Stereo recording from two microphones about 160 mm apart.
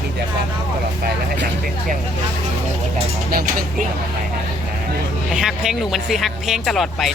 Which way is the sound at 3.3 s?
65° right (ahead or behind).